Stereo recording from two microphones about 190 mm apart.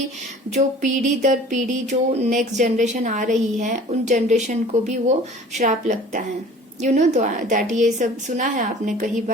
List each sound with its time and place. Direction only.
0.5 s speech: 40° right (ahead or behind)